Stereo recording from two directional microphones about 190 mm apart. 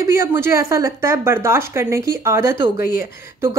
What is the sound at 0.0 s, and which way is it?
Speech, 15° right (ahead or behind).